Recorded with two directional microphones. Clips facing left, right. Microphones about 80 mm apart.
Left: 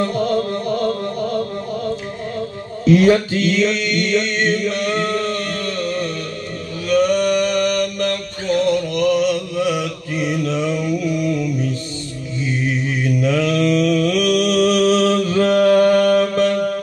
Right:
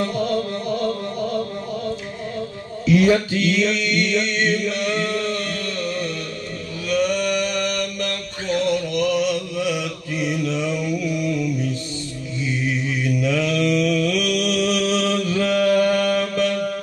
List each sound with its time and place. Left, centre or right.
0.0 s music: left
2.8 s mantra: left
6.9 s a sound: left
8.6 s mantra: left
13.0 s mantra: left